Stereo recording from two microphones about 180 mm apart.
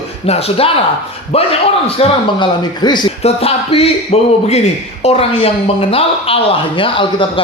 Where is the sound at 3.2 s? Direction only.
35° left (ahead or behind).